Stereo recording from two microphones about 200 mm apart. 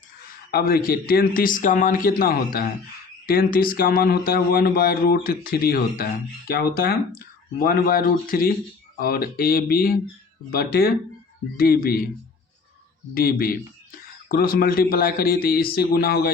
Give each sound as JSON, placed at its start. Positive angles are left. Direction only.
{"t": 0.5, "sound": "a man's voice", "side_deg": 50}
{"t": 13.1, "sound": "a man's voice", "side_deg": 45}